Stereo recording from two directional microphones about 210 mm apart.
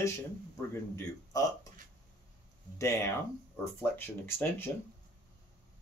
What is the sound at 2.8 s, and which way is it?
Speech, 15° left (ahead or behind).